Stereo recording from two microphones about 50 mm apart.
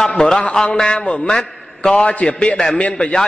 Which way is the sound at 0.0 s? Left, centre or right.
Centre.